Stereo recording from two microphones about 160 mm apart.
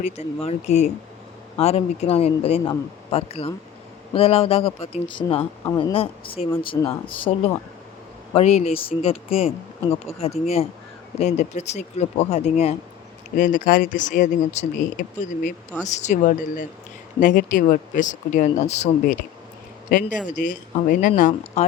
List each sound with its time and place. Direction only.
0.0 s speech: 40° left (ahead or behind)
6.7 s speech: 20° left (ahead or behind)
8.3 s speech: 40° left (ahead or behind)
13.3 s speech: 55° left (ahead or behind)
19.9 s speech: 60° left (ahead or behind)